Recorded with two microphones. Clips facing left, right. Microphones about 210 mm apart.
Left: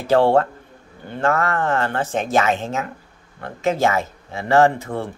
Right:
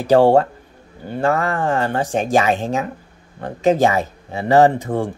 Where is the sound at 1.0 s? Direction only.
10° right (ahead or behind).